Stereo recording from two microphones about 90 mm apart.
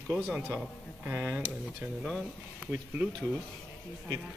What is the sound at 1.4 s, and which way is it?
Speech, 10° right (ahead or behind).